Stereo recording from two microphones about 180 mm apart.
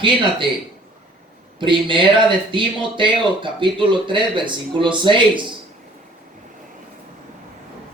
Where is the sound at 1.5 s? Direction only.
25° right (ahead or behind).